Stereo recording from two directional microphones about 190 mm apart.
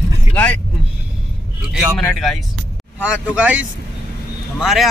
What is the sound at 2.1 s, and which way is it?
Speech, centre (ahead or behind).